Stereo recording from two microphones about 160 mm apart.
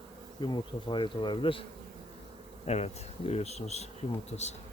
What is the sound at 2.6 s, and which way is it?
Bee, 40° left (ahead or behind).